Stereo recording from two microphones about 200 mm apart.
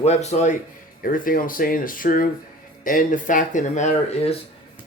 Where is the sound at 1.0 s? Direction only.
45° left (ahead or behind).